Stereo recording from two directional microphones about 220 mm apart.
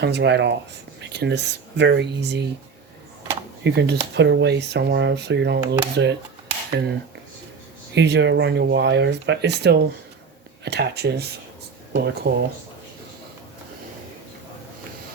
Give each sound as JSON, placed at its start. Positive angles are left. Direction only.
{"t": 0.0, "sound": "speech", "side_deg": -50}
{"t": 3.6, "sound": "speech", "side_deg": -50}
{"t": 7.9, "sound": "speech", "side_deg": -50}